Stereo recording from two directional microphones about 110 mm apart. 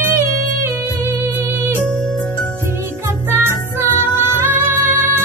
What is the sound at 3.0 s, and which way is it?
Music, 30° right (ahead or behind).